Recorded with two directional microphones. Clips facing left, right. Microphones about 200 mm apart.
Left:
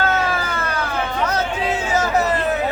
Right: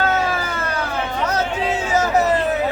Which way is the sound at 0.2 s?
20° right (ahead or behind).